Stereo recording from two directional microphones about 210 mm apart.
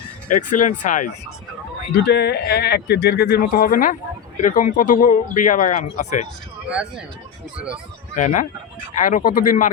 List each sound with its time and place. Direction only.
0.3 s speech: 40° left (ahead or behind)
2.0 s speech: 50° left (ahead or behind); by 6.2 s 35° left (ahead or behind)
6.7 s speech: 5° right (ahead or behind)
8.1 s speech: 40° left (ahead or behind)